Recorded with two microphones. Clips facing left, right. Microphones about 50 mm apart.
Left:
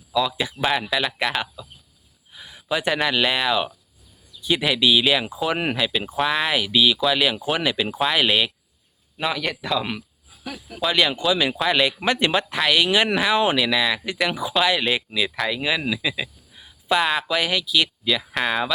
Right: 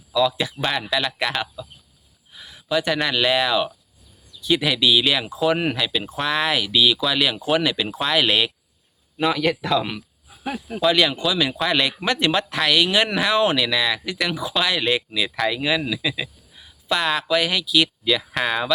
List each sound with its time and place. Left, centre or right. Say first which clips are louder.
0.1 s speech: right 2 dB; centre
10.2 s cricket: right 8 dB; right
10.8 s speech: right 2 dB; centre